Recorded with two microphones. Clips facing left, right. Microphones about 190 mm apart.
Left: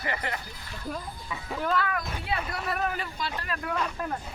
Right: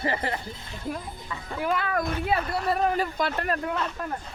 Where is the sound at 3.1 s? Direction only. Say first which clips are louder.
Right 7 dB; 55° right (ahead or behind).